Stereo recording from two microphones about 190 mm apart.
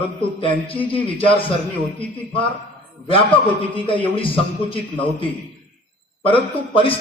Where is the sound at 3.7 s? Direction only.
30° left (ahead or behind).